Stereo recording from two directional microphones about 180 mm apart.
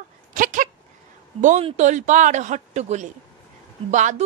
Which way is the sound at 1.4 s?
40° right (ahead or behind).